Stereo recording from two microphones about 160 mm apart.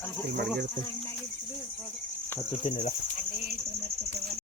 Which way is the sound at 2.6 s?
45° left (ahead or behind).